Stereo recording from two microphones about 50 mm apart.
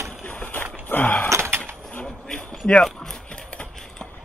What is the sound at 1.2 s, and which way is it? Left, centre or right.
Door, right.